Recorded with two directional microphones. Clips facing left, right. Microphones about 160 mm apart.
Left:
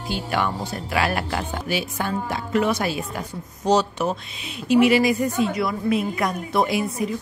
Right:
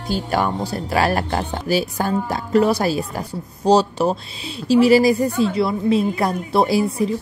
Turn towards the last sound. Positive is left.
turn(degrees=-30)  # may be behind; listen again after turning